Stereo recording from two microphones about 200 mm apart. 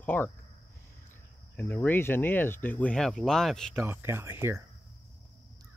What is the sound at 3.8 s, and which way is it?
Speech, 10° right (ahead or behind).